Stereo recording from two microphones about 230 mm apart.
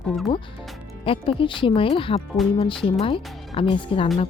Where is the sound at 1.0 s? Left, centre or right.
Left.